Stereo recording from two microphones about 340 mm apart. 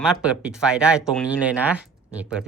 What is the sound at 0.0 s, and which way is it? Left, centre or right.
Speech, centre.